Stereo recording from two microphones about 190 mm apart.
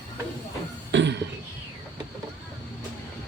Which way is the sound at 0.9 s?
70° right (ahead or behind).